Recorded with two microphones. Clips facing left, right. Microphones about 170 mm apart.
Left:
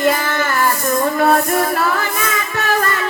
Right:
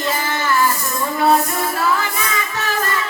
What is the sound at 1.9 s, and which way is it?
Music, 55° left (ahead or behind).